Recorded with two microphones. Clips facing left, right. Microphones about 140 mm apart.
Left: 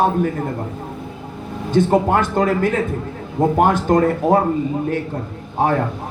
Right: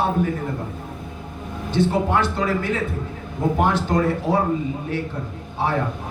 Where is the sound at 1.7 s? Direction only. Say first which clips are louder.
Left 5 dB; 45° left (ahead or behind).